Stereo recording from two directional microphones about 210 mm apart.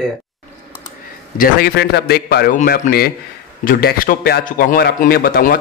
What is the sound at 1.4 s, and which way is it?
A man's voice, 50° left (ahead or behind).